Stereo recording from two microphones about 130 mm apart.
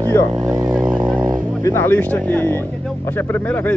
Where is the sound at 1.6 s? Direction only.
20° left (ahead or behind).